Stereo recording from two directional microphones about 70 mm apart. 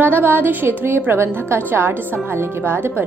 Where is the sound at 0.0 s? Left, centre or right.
Right.